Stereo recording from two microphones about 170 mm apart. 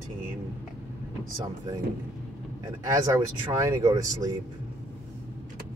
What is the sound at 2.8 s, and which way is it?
Speech, 15° right (ahead or behind).